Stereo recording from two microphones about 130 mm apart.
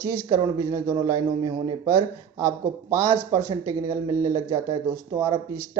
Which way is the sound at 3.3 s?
25° right (ahead or behind).